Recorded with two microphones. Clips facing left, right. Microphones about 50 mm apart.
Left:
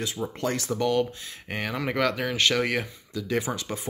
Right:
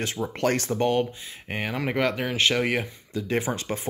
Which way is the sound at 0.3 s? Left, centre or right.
Right.